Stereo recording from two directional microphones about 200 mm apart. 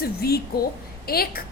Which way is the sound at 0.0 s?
50° left (ahead or behind).